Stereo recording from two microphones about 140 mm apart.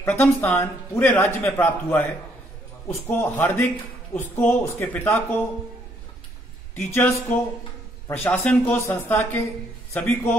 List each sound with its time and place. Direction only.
0.0 s speech: 15° left (ahead or behind)
3.1 s speech: 15° left (ahead or behind)
6.7 s speech: 15° left (ahead or behind)